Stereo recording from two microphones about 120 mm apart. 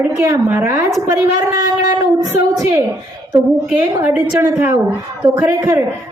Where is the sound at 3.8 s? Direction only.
25° right (ahead or behind).